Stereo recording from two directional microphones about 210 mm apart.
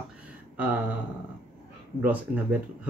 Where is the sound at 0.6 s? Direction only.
10° right (ahead or behind).